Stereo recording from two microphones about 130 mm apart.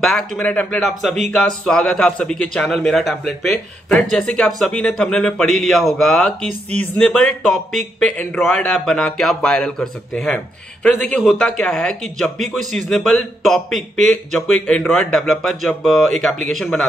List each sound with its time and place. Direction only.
0.0 s speech: 5° left (ahead or behind)